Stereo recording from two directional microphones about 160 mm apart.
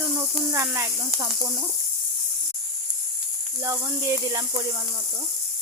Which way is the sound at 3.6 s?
20° right (ahead or behind).